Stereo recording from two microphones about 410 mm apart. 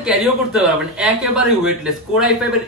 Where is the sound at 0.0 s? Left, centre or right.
Centre.